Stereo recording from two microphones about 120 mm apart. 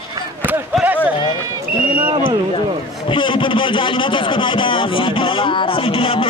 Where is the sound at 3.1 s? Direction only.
45° left (ahead or behind).